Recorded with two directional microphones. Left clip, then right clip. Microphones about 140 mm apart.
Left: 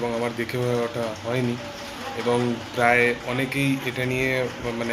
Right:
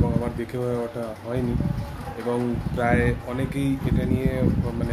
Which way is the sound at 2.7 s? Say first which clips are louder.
Left 4 dB; 10° right (ahead or behind).